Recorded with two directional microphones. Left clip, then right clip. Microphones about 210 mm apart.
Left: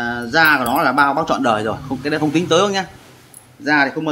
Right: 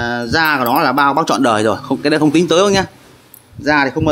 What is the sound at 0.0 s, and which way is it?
Speech, 50° right (ahead or behind).